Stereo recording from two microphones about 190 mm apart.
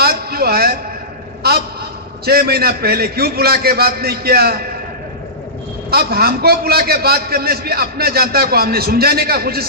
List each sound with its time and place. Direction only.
0.0 s a sound: 55° right (ahead or behind)
2.2 s a man's voice: 55° right (ahead or behind)
5.9 s a man's voice: 55° right (ahead or behind)